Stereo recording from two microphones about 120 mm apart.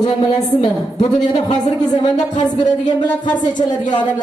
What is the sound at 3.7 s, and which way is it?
Speech, 35° left (ahead or behind).